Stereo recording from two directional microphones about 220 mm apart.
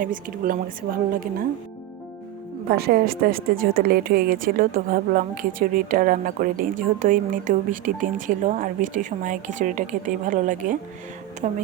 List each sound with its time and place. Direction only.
0.0 s speech: 40° right (ahead or behind)
2.6 s speech: 45° right (ahead or behind)